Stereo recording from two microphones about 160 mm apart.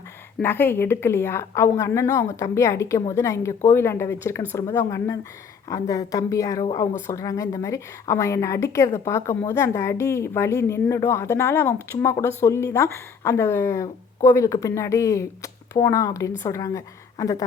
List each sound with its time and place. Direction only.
0.3 s a woman's voice: 10° left (ahead or behind)